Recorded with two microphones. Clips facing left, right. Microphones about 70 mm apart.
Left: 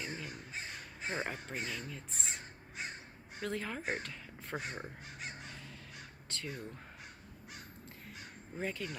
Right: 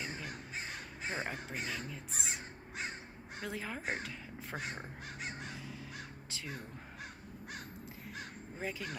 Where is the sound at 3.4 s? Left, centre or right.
Centre.